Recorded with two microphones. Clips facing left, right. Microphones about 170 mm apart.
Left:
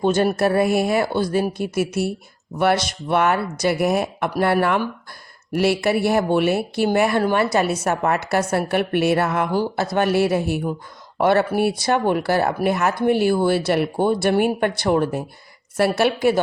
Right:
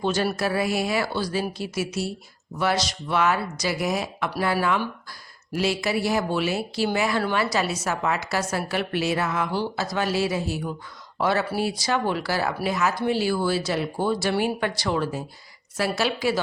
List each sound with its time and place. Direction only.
0.0 s a woman's voice: 50° left (ahead or behind)